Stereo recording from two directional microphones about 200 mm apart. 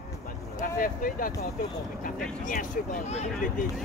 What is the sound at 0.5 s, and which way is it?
Speech, 45° left (ahead or behind).